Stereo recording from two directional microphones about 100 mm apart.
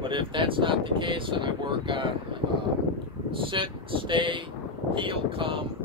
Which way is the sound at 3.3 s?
60° right (ahead or behind).